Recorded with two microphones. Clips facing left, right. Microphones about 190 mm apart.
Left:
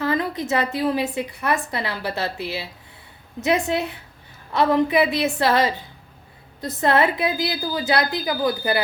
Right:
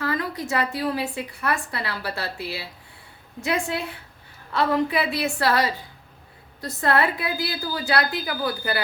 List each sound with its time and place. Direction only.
0.0 s a woman's voice: 20° left (ahead or behind)